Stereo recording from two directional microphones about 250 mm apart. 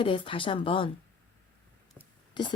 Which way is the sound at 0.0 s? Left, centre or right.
Centre.